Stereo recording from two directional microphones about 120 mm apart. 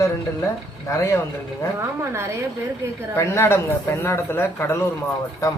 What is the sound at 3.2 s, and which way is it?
A man's voice, 20° left (ahead or behind).